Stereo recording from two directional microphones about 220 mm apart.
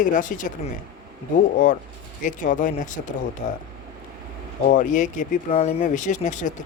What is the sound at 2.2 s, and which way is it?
Speech, 35° left (ahead or behind).